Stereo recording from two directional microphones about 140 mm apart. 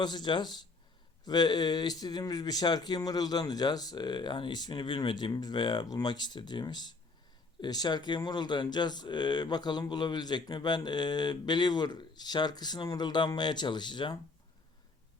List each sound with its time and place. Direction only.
0.0 s speech: 30° left (ahead or behind)